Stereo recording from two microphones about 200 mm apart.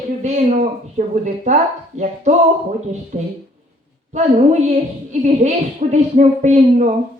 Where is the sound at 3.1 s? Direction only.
40° right (ahead or behind).